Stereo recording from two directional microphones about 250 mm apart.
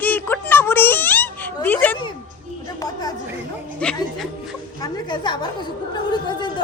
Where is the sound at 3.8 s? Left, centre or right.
Centre.